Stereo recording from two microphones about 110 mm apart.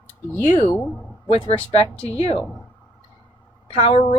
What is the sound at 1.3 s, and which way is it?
Speech, 65° left (ahead or behind).